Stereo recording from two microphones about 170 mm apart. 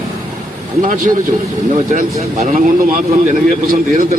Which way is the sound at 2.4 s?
50° right (ahead or behind).